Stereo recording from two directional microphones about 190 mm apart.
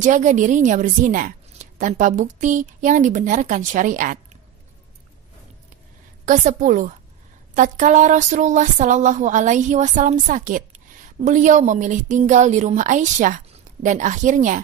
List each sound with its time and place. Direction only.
0.0 s speech: 40° right (ahead or behind)
6.2 s a woman's voice: 40° right (ahead or behind)